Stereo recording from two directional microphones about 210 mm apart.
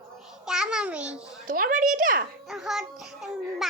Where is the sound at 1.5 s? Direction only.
40° right (ahead or behind).